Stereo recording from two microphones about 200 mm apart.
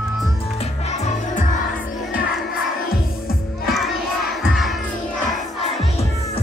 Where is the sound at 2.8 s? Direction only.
45° left (ahead or behind).